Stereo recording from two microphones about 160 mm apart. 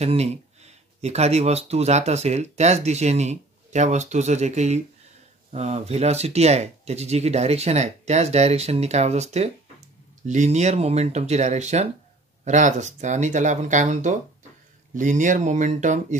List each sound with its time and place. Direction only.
0.0 s speech: 40° right (ahead or behind)